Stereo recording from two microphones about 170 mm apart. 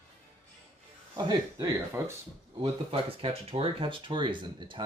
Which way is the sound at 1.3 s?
20° right (ahead or behind).